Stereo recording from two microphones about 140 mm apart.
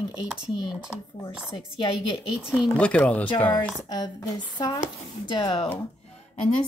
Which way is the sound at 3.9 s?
30° left (ahead or behind).